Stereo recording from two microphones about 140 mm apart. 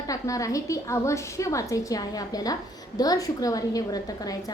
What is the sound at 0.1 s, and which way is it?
A woman's voice, 25° left (ahead or behind).